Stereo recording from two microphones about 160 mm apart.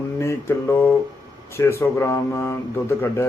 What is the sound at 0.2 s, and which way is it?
Mantra, 15° left (ahead or behind).